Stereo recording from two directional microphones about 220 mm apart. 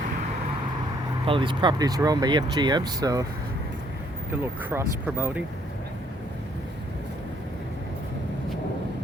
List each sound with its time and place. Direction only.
1.2 s speech: 25° right (ahead or behind)
4.3 s speech: 10° right (ahead or behind)